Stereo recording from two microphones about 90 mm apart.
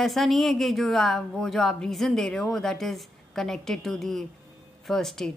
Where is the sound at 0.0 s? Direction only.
Centre (ahead or behind).